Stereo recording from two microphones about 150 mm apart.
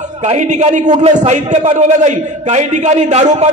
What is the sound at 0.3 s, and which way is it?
A man's voice, 50° right (ahead or behind).